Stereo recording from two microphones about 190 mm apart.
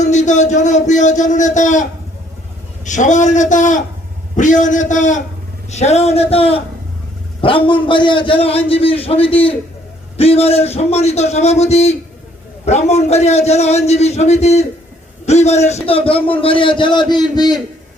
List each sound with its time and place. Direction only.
0.0 s a man's voice: 40° left (ahead or behind); by 17.6 s 20° left (ahead or behind)